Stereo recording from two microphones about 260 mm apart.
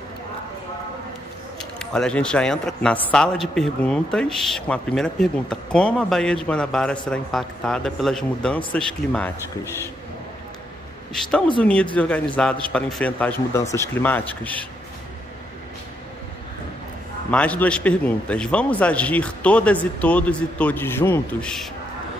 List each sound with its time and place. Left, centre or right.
1.6 s speech: centre
11.2 s speech: centre
17.3 s speech: centre